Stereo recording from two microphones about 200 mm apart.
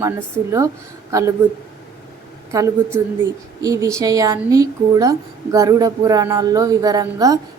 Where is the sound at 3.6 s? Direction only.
15° right (ahead or behind).